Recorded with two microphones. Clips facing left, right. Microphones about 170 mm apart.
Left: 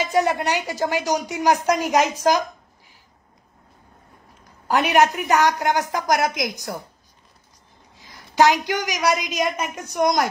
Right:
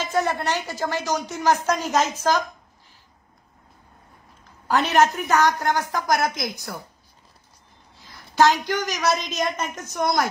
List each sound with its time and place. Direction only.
0.0 s a woman's voice: 15° left (ahead or behind)
4.6 s a woman's voice: 15° left (ahead or behind)
7.9 s a woman's voice: 15° left (ahead or behind)